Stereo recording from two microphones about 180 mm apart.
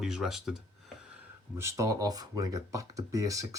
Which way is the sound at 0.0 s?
Centre (ahead or behind).